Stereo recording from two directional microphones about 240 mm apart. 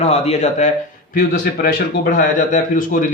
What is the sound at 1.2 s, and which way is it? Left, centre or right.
Speech, left.